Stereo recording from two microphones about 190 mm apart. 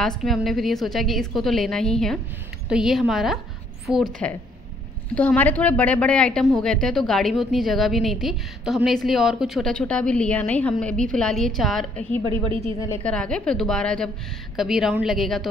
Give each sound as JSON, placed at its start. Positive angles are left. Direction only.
{"t": 0.0, "sound": "a woman's voice", "side_deg": 0}
{"t": 12.5, "sound": "a woman's voice", "side_deg": 20}
{"t": 13.0, "sound": "a woman's voice", "side_deg": 5}